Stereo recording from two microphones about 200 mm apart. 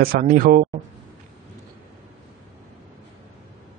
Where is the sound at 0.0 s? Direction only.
45° right (ahead or behind).